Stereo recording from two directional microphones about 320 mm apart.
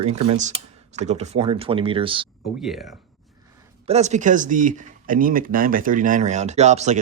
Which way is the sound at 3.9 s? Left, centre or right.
Right.